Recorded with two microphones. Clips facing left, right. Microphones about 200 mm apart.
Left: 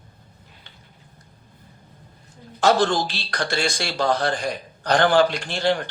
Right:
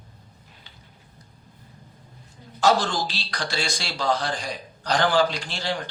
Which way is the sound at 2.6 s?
55° left (ahead or behind).